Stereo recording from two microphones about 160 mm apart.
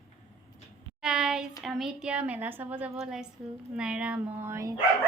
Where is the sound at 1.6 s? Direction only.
5° right (ahead or behind).